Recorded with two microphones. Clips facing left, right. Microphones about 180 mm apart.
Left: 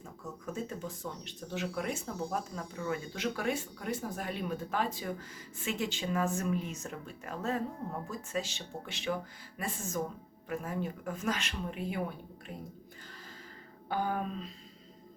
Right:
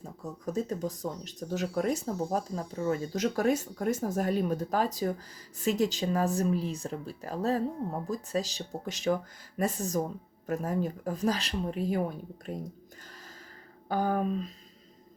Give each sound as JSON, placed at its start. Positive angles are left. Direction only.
{"t": 0.0, "sound": "speech", "side_deg": -35}
{"t": 13.8, "sound": "speech", "side_deg": -40}